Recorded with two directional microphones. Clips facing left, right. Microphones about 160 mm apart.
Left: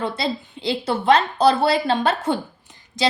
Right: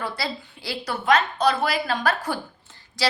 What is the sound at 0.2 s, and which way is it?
A woman's voice, 20° left (ahead or behind).